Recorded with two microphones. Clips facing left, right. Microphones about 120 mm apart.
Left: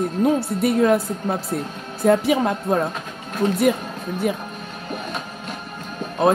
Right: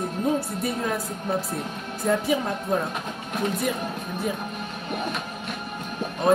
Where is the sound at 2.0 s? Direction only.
70° left (ahead or behind).